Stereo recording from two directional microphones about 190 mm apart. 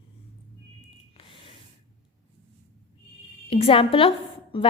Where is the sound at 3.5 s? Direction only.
30° left (ahead or behind).